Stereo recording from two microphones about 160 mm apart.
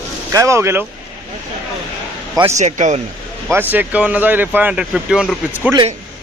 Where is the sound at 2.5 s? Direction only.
50° right (ahead or behind).